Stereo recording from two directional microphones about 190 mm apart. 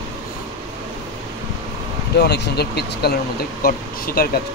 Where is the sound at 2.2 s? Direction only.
60° left (ahead or behind).